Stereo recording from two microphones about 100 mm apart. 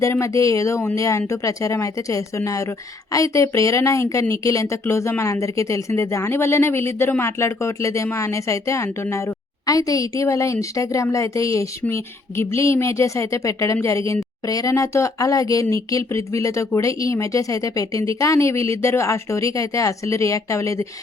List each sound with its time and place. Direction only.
0.0 s speech: 30° left (ahead or behind)